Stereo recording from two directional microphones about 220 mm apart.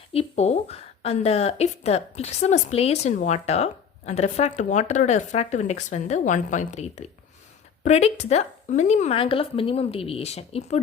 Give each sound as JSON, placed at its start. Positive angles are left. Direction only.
{"t": 0.1, "sound": "a woman's voice", "side_deg": 30}